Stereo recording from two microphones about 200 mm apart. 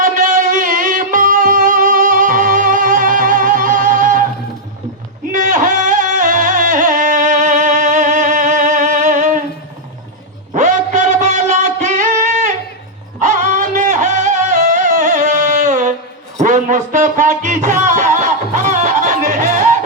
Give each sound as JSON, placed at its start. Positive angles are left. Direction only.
{"t": 0.0, "sound": "music", "side_deg": -40}
{"t": 5.3, "sound": "music", "side_deg": -40}
{"t": 10.5, "sound": "music", "side_deg": -35}
{"t": 13.1, "sound": "music", "side_deg": -40}